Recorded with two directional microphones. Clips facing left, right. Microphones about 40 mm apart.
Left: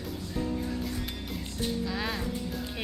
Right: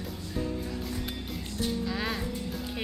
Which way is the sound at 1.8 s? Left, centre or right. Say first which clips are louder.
Right 1 dB; centre.